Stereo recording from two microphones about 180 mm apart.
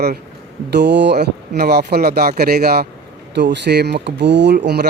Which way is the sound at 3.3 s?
70° right (ahead or behind).